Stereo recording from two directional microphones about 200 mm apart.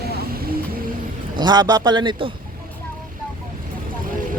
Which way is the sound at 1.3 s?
20° right (ahead or behind).